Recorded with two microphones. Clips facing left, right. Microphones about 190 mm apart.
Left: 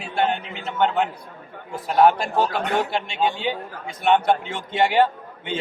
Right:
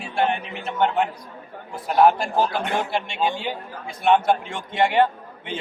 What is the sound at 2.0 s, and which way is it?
A man's voice, centre (ahead or behind).